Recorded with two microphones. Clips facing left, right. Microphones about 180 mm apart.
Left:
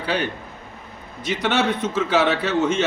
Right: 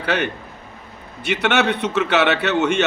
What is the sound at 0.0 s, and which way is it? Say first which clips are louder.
A man's voice: right 2 dB; 65° right (ahead or behind).